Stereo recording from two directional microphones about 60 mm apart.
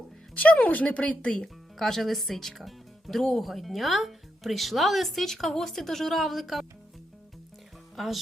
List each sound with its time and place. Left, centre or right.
0.3 s speech: left
1.3 s speech: centre
7.9 s speech: centre